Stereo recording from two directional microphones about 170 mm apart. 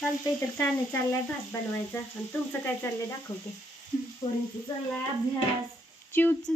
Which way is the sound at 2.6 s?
15° left (ahead or behind).